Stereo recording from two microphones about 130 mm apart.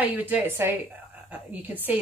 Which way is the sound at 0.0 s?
15° right (ahead or behind).